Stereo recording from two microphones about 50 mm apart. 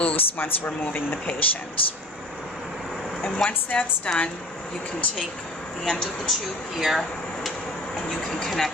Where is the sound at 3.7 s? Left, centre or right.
Left.